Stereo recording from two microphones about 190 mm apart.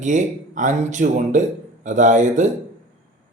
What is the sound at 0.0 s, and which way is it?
Speech, 40° right (ahead or behind).